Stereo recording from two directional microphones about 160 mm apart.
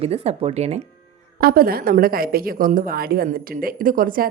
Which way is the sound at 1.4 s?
65° right (ahead or behind).